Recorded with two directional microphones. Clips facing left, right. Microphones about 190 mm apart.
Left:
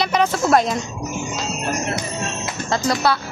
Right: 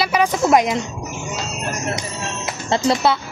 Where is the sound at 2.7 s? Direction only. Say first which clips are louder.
Right 3 dB; 25° right (ahead or behind).